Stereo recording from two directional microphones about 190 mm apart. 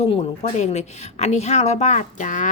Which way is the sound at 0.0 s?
35° left (ahead or behind).